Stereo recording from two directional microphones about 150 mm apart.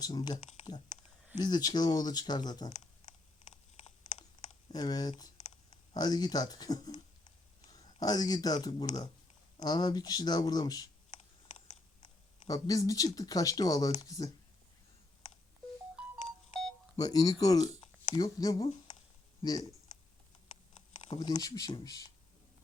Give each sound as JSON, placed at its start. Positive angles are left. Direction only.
{"t": 0.0, "sound": "speech", "side_deg": 25}
{"t": 1.4, "sound": "speech", "side_deg": 25}
{"t": 2.6, "sound": "a sound", "side_deg": 50}
{"t": 4.7, "sound": "speech", "side_deg": 25}
{"t": 12.5, "sound": "speech", "side_deg": 25}
{"t": 17.0, "sound": "speech", "side_deg": 25}
{"t": 21.2, "sound": "speech", "side_deg": 25}